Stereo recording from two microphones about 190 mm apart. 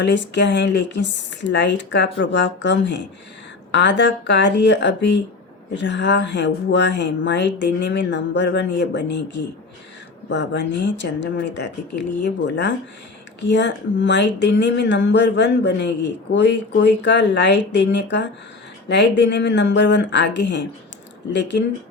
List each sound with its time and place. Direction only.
0.0 s speech: 70° left (ahead or behind)